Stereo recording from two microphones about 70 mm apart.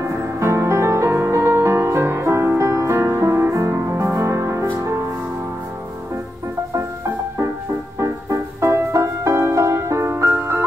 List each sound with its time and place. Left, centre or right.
0.0 s music: right
8.0 s music: right